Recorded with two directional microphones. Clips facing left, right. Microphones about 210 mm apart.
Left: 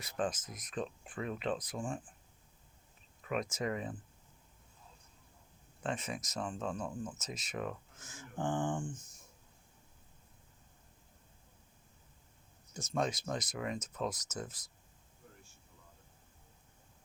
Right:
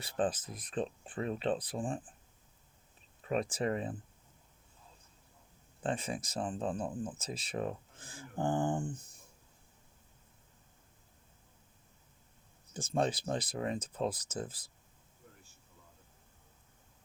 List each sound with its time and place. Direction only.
0.0 s speech: 30° right (ahead or behind)
3.2 s speech: 35° right (ahead or behind)
5.8 s speech: 30° right (ahead or behind)
12.7 s speech: 30° right (ahead or behind)